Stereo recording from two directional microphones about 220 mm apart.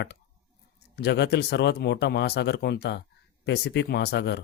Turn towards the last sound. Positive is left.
turn(degrees=50)  # may be behind; listen again after turning